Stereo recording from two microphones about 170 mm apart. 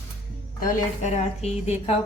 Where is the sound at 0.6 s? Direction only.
40° left (ahead or behind).